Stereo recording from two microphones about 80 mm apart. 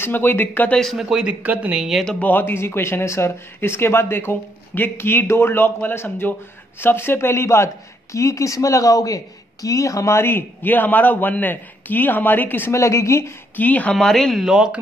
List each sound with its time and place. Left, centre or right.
0.0 s speech: left
0.9 s speech: centre
1.9 s speech: centre
2.1 s speech: left
12.7 s speech: left
13.6 s speech: centre
13.9 s speech: centre